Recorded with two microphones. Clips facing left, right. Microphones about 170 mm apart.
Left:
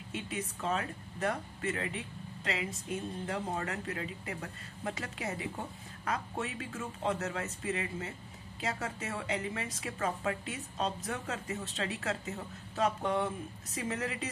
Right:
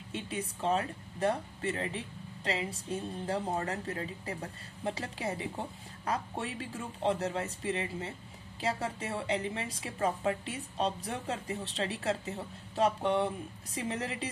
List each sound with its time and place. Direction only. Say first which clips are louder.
0.1 s speech: right 1 dB; 30° right (ahead or behind)